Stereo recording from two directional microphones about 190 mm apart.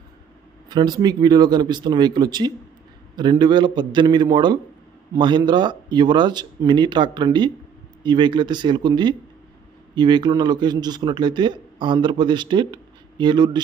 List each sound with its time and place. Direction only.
0.7 s speech: 20° right (ahead or behind)